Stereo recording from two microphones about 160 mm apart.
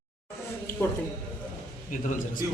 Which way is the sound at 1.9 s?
55° left (ahead or behind).